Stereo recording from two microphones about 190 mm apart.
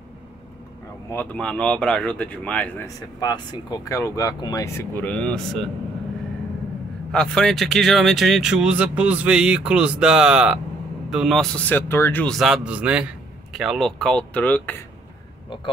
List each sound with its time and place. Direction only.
1.1 s speech: 10° left (ahead or behind)
3.2 s speech: 20° left (ahead or behind); by 5.7 s 5° left (ahead or behind)
7.1 s speech: 5° left (ahead or behind)
15.5 s speech: 25° left (ahead or behind)